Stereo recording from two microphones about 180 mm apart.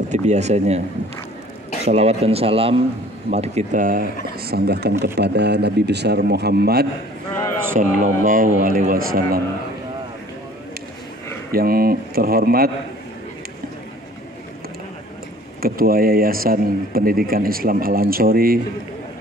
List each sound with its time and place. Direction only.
0.1 s speech: 40° right (ahead or behind)
1.9 s speech: 35° right (ahead or behind); by 6.9 s 65° right (ahead or behind)
7.7 s speech: 50° right (ahead or behind)
11.5 s speech: 55° right (ahead or behind)
15.6 s speech: 55° right (ahead or behind)